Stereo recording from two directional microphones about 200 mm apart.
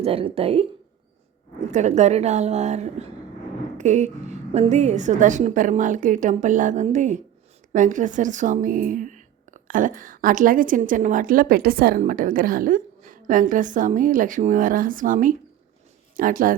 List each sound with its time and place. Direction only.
0.0 s a woman's voice: 30° right (ahead or behind)
1.7 s speech: 35° right (ahead or behind)